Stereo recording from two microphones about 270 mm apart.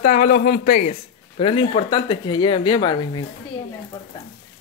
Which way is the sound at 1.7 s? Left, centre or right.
Centre.